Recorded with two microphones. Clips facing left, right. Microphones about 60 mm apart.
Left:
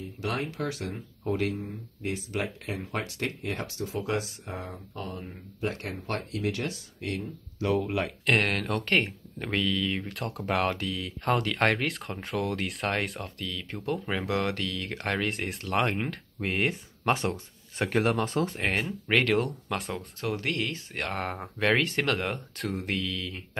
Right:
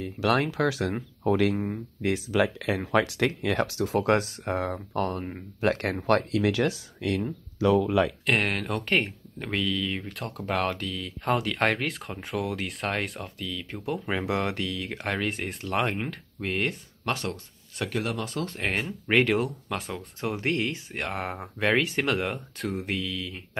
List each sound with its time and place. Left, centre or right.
0.0 s speech: right
1.6 s speech: right
5.6 s speech: right
8.3 s speech: centre
14.2 s speech: centre
14.8 s speech: centre
17.0 s speech: left
18.6 s speech: centre
20.2 s speech: right
20.9 s speech: centre